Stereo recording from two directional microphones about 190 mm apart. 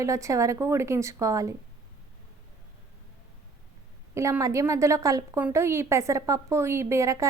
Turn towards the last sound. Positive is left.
turn(degrees=-15)  # may be behind; listen again after turning